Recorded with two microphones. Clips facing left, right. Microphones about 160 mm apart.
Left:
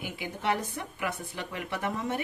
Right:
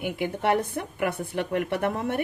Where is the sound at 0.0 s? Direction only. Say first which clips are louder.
Right 7 dB; 60° right (ahead or behind).